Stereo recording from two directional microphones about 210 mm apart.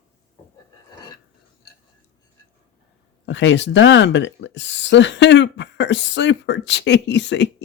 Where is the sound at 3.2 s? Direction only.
60° left (ahead or behind).